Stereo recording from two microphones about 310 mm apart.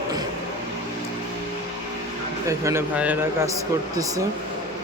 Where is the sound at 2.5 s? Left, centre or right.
Centre.